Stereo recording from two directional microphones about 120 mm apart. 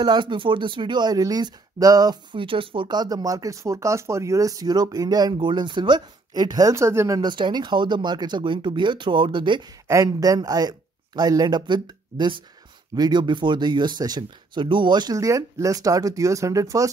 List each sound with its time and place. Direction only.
0.0 s speech: 40° right (ahead or behind)
2.4 s speech: 45° right (ahead or behind)
6.7 s speech: 20° right (ahead or behind)
7.2 s speech: 40° right (ahead or behind)
9.8 s speech: 30° right (ahead or behind)